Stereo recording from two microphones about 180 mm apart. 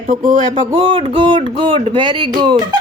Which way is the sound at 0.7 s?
25° right (ahead or behind).